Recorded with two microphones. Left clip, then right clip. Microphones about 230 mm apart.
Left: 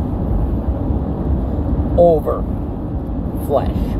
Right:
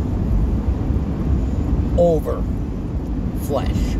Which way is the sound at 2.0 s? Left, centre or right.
Centre.